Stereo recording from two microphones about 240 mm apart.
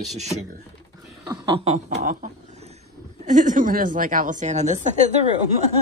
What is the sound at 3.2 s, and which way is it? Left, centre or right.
A woman's voice, right.